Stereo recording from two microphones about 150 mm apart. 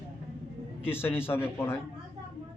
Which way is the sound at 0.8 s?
15° left (ahead or behind).